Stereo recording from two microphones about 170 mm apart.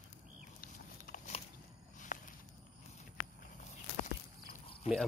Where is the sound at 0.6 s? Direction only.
60° left (ahead or behind).